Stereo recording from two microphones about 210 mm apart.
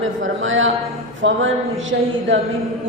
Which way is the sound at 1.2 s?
65° right (ahead or behind).